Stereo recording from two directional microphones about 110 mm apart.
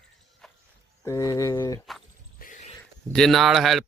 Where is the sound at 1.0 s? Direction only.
30° left (ahead or behind).